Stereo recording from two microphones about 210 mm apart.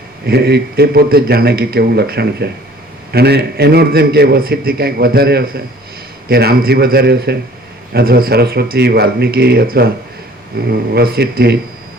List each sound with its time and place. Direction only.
0.3 s a man's voice: 50° right (ahead or behind)